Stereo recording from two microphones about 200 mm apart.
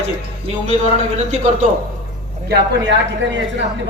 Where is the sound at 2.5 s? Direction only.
60° right (ahead or behind).